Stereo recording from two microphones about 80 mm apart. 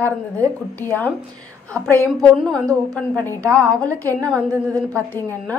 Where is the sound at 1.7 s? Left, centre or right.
Right.